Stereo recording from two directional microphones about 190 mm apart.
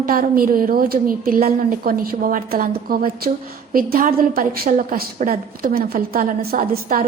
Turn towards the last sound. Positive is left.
turn(degrees=-45)  # may be behind; listen again after turning